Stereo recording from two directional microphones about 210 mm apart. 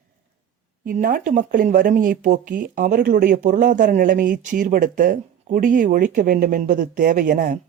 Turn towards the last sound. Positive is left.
turn(degrees=-40)  # may be behind; listen again after turning